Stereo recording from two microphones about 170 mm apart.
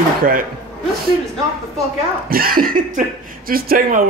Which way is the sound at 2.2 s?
60° right (ahead or behind).